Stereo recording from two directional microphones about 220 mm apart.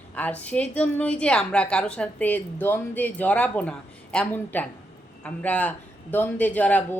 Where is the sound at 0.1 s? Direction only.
5° left (ahead or behind).